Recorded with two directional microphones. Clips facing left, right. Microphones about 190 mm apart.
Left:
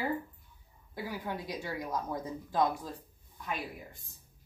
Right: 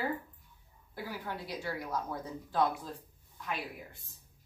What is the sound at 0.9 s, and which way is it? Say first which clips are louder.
Speech: left 2 dB; 15° left (ahead or behind).